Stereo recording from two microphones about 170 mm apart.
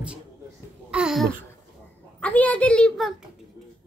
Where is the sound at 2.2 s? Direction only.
10° left (ahead or behind).